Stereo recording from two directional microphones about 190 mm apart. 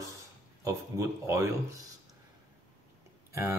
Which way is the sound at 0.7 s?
15° right (ahead or behind).